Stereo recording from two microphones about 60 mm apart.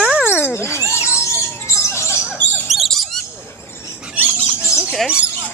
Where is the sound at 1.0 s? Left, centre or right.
Left.